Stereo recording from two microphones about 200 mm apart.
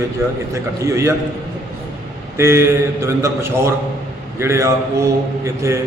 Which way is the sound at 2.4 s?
15° right (ahead or behind).